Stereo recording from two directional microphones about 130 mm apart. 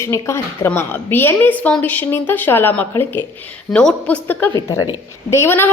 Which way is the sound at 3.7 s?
10° left (ahead or behind).